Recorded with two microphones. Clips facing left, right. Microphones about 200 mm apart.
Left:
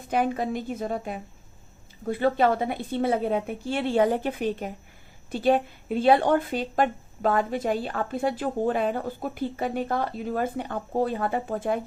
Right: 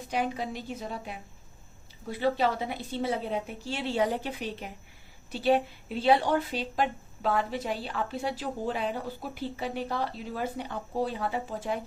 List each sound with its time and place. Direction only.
0.1 s speech: 50° left (ahead or behind)